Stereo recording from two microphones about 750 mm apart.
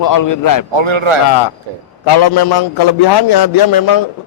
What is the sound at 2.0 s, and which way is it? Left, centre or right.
A man's voice, left.